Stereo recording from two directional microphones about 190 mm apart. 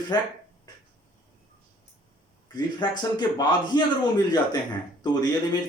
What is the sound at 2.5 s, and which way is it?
A man's voice, 20° left (ahead or behind).